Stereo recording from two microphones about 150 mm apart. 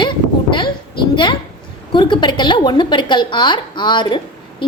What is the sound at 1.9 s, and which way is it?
A woman's voice, 30° left (ahead or behind).